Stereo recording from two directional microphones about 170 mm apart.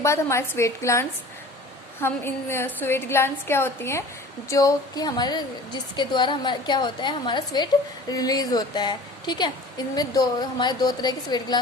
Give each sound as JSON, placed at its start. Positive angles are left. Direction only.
{"t": 0.0, "sound": "a woman's voice", "side_deg": 15}